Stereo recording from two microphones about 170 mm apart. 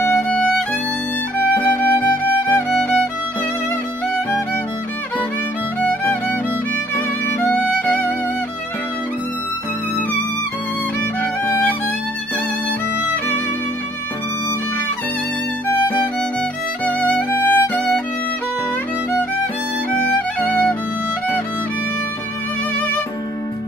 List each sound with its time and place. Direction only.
0.0 s violin: 10° left (ahead or behind)
1.6 s music: 10° left (ahead or behind)
5.9 s music: 10° left (ahead or behind)
7.4 s music: 10° left (ahead or behind)
11.4 s music: 15° left (ahead or behind)
16.8 s music: 10° left (ahead or behind)
20.4 s music: 10° left (ahead or behind)